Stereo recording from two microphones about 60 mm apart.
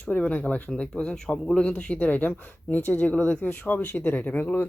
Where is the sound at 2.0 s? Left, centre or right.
Left.